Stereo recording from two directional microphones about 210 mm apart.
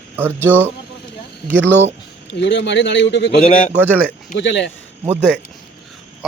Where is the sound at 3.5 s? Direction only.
40° left (ahead or behind).